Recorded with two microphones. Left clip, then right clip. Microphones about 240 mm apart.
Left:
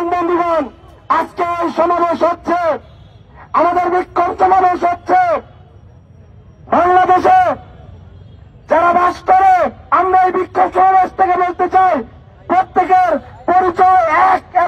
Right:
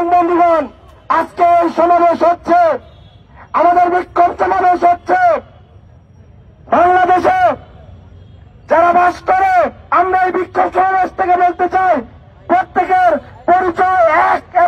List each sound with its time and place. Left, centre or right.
0.0 s a sound: right
3.3 s a man's voice: right
6.7 s a man's voice: right
8.6 s a man's voice: right